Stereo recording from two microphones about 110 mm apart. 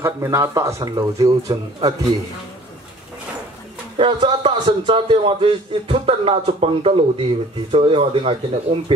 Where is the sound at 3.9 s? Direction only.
50° right (ahead or behind).